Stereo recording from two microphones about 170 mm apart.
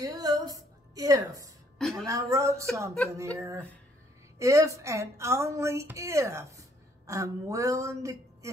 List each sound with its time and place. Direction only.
0.0 s a sound: 20° right (ahead or behind)
1.8 s a woman's voice: centre (ahead or behind)
2.0 s speech: 20° right (ahead or behind)